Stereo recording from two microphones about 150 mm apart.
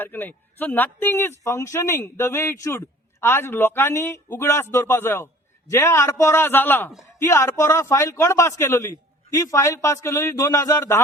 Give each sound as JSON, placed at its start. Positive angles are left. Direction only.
{"t": 0.0, "sound": "speech", "side_deg": 10}